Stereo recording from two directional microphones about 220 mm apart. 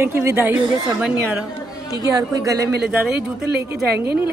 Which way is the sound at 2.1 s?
15° right (ahead or behind).